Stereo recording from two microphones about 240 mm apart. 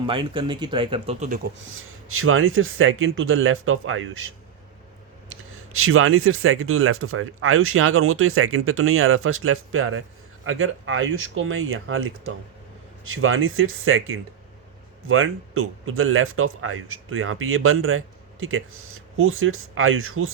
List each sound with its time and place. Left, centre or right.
0.0 s speech: right
1.5 s speech: right
5.7 s speech: right